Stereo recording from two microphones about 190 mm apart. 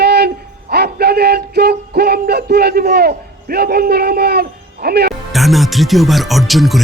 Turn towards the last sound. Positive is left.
turn(degrees=0)  # may be behind; listen again after turning